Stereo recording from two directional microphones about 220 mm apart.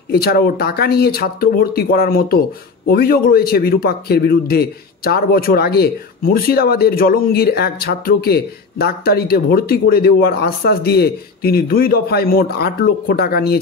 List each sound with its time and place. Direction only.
0.1 s a man's voice: 45° left (ahead or behind)